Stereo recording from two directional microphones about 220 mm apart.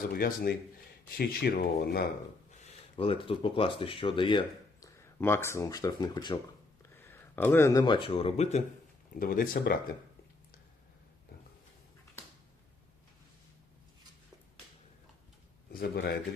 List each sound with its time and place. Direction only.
0.1 s speech: 40° left (ahead or behind)
2.9 s speech: 25° left (ahead or behind)
5.2 s speech: 10° left (ahead or behind); by 8.6 s 30° left (ahead or behind)
9.1 s speech: 40° left (ahead or behind)
15.7 s a man's voice: 45° left (ahead or behind)